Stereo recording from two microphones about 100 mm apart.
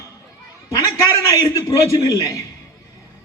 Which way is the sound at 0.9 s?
35° left (ahead or behind).